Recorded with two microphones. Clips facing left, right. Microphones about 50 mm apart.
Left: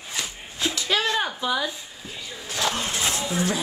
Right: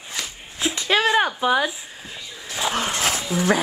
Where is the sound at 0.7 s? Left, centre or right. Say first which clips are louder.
Right 6 dB; right.